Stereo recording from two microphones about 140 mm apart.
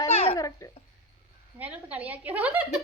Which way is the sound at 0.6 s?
20° left (ahead or behind).